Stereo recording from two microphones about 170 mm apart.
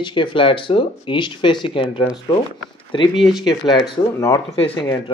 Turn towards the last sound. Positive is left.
turn(degrees=10)  # may be behind; listen again after turning